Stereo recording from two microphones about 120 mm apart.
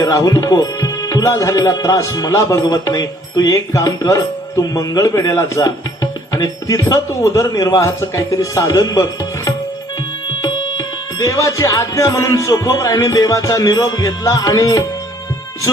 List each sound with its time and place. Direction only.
0.0 s speech: 25° left (ahead or behind)